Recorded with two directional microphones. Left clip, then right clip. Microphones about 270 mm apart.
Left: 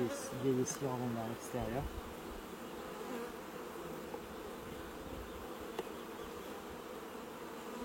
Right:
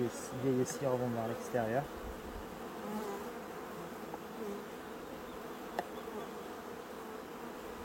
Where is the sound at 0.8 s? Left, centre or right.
Centre.